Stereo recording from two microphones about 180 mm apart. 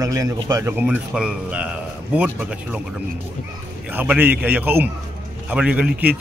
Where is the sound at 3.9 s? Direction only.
10° right (ahead or behind).